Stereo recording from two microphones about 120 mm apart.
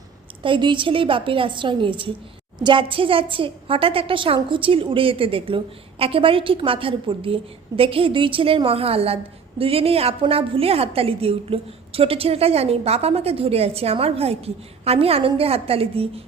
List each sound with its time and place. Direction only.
0.4 s a woman's voice: 45° right (ahead or behind)